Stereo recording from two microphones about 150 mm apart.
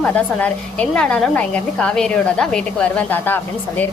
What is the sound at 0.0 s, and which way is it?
A woman's voice, 10° left (ahead or behind).